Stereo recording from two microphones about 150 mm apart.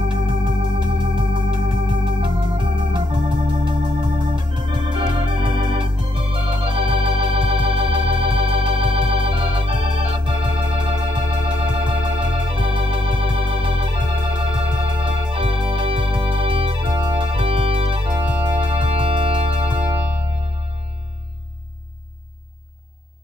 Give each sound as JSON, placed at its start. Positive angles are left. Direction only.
{"t": 0.1, "sound": "organ", "side_deg": -35}
{"t": 18.8, "sound": "music", "side_deg": -45}